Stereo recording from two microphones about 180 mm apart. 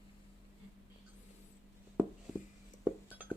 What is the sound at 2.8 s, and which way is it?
Chink, 10° right (ahead or behind).